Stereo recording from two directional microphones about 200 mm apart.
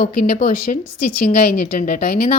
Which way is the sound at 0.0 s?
45° left (ahead or behind).